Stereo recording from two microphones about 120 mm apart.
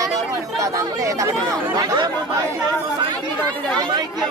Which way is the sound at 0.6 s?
25° right (ahead or behind).